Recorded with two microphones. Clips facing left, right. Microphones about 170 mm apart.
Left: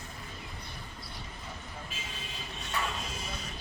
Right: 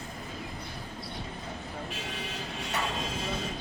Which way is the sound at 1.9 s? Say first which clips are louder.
Right 6 dB; 75° right (ahead or behind).